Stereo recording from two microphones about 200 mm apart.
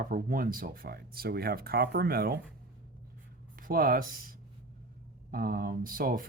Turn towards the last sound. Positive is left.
turn(degrees=-45)  # may be behind; listen again after turning